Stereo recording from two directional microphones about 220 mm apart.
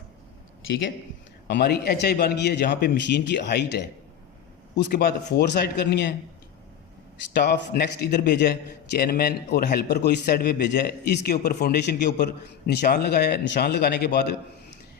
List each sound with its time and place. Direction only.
1.5 s a man's voice: 50° left (ahead or behind)
7.3 s a man's voice: 50° left (ahead or behind)